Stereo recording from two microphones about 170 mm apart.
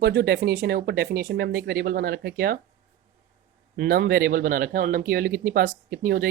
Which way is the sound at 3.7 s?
60° right (ahead or behind).